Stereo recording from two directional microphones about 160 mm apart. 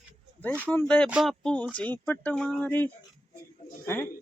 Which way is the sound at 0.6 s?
10° left (ahead or behind).